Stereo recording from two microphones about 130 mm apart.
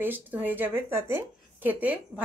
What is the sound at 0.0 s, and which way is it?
Speech, 15° right (ahead or behind).